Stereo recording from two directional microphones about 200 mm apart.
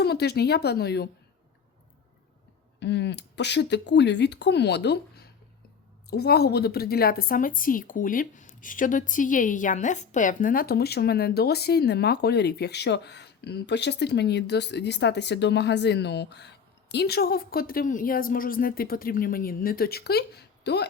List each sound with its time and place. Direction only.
0.0 s a woman's voice: 55° left (ahead or behind)
2.8 s a woman's voice: 60° left (ahead or behind)